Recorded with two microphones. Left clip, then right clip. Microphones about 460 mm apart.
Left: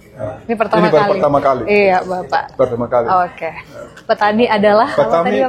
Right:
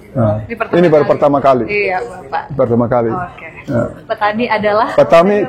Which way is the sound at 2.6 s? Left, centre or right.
Right.